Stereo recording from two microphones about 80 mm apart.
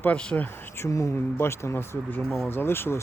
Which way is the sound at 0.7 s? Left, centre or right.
Left.